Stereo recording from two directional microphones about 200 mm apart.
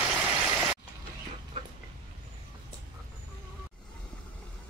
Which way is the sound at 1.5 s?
25° right (ahead or behind).